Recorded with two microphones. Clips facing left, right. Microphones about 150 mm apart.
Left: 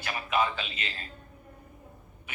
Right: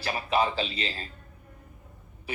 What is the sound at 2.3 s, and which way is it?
Speech, 35° right (ahead or behind).